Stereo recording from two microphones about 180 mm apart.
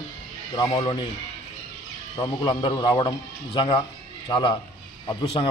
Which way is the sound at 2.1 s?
25° left (ahead or behind).